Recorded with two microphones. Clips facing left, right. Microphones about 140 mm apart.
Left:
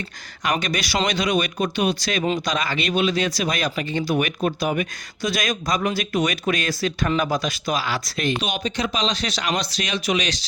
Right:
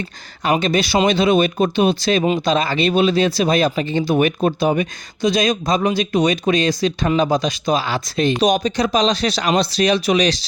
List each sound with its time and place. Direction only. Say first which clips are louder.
0.4 s speech: right 7 dB; 25° right (ahead or behind)
2.2 s speech: right 5 dB; 15° right (ahead or behind)
2.5 s speech: right 7 dB; 30° right (ahead or behind)
8.4 s speech: right 8 dB; 40° right (ahead or behind)